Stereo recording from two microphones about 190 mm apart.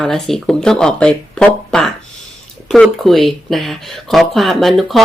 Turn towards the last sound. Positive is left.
turn(degrees=0)  # may be behind; listen again after turning